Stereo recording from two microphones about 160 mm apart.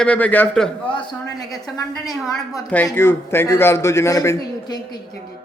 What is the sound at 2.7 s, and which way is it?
A man's voice, 10° left (ahead or behind).